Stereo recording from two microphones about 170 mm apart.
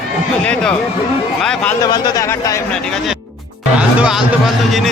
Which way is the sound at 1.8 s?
25° left (ahead or behind).